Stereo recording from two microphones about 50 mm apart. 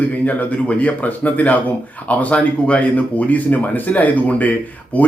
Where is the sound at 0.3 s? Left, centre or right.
Left.